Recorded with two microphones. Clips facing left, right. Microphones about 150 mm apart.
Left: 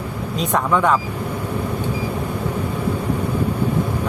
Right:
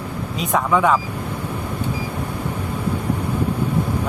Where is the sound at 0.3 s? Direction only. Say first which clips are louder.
Even; 5° right (ahead or behind).